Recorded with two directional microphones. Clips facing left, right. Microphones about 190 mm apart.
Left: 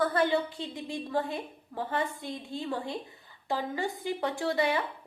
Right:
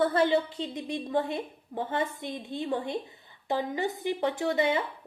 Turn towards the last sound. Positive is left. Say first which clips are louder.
# right 2 dB
turn(degrees=-20)  # may be behind; listen again after turning